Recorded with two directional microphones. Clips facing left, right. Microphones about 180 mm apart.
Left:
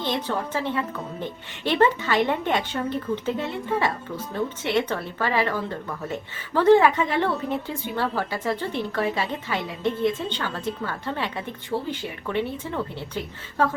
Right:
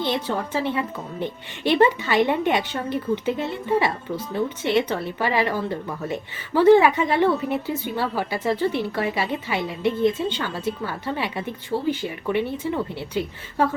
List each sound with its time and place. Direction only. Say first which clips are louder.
0.0 s a woman's voice: right 2 dB; 10° right (ahead or behind)